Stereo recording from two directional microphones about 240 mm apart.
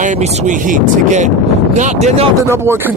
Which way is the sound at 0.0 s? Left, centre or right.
Right.